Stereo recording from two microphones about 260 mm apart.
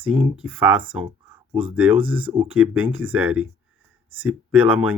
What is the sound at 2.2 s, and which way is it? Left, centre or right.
Speech, right.